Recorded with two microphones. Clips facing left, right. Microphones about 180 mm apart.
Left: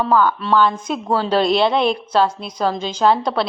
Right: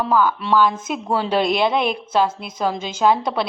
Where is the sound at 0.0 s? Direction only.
10° right (ahead or behind).